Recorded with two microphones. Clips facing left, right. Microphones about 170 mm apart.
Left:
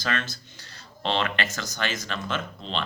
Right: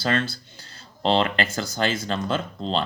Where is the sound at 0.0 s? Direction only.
30° right (ahead or behind).